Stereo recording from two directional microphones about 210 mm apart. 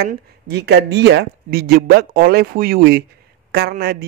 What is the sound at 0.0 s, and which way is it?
A man's voice, 50° right (ahead or behind).